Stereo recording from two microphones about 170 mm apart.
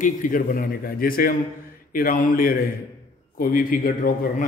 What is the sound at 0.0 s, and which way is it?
A man's voice, 55° left (ahead or behind).